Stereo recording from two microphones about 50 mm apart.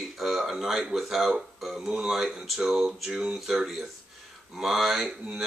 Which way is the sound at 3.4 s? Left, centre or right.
Centre.